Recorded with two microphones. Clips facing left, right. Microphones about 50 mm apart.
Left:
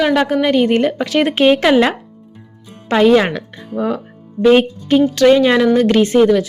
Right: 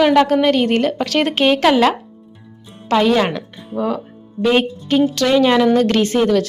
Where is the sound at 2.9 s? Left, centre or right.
Left.